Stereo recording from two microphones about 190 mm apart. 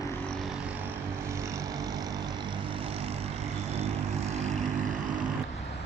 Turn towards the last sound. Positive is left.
turn(degrees=-40)  # may be behind; listen again after turning